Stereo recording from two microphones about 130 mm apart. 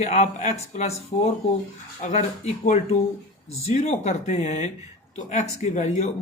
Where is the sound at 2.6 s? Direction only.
65° left (ahead or behind).